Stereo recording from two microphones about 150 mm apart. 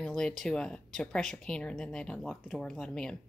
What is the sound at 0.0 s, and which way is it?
Speech, 5° left (ahead or behind).